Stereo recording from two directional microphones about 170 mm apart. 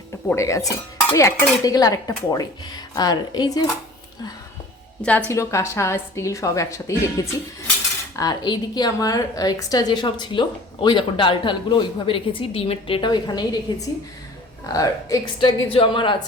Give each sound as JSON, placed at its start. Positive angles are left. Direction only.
{"t": 0.3, "sound": "a woman's voice", "side_deg": 15}
{"t": 5.0, "sound": "a woman's voice", "side_deg": 15}